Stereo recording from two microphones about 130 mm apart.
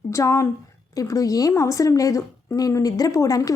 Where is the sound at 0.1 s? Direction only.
25° left (ahead or behind).